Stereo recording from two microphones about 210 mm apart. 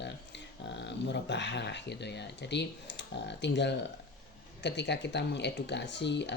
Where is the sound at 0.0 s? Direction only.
55° left (ahead or behind).